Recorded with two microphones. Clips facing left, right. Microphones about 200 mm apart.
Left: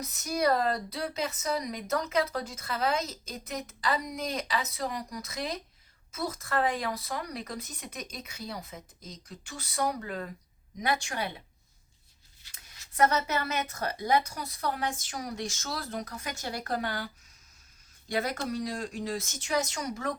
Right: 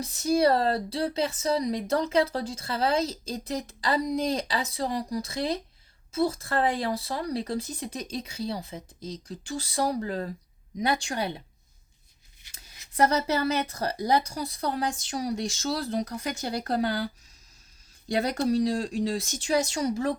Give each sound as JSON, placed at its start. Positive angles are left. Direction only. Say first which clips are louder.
{"t": 0.0, "sound": "speech", "louder": "right 6 dB", "side_deg": -30}
{"t": 13.0, "sound": "speech", "louder": "right 3 dB", "side_deg": -35}
{"t": 18.1, "sound": "speech", "louder": "right 6 dB", "side_deg": -35}